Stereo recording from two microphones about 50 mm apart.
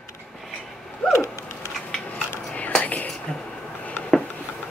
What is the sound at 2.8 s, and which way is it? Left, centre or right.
Whispering, left.